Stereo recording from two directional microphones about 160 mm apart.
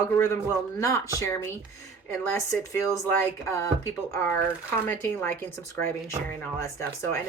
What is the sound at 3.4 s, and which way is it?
Speech, 15° left (ahead or behind).